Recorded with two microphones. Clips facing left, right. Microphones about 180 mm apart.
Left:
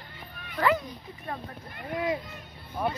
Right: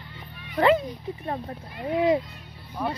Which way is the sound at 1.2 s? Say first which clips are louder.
Right 3 dB; 35° right (ahead or behind).